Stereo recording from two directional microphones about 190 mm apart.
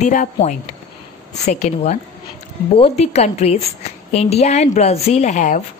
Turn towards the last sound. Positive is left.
turn(degrees=40)  # may be behind; listen again after turning